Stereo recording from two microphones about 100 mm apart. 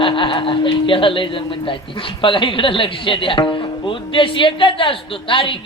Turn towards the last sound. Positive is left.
turn(degrees=60)  # may be behind; listen again after turning